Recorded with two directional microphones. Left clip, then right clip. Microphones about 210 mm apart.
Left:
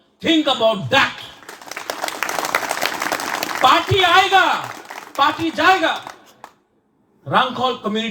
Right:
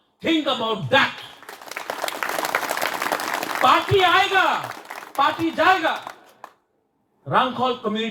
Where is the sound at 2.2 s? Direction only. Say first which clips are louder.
Left 3 dB; 35° left (ahead or behind).